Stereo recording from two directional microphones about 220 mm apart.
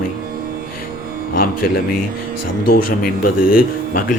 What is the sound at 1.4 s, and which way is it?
Speech, 40° left (ahead or behind).